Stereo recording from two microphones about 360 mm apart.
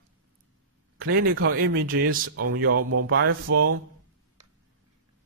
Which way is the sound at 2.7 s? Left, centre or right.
Right.